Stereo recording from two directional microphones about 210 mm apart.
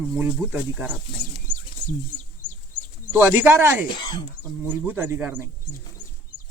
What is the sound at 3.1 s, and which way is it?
Speech, 10° right (ahead or behind).